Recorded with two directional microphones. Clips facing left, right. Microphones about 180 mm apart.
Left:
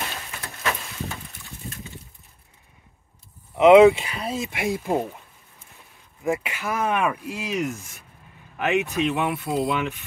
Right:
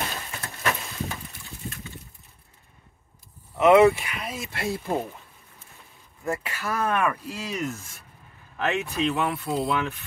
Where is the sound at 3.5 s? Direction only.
15° left (ahead or behind).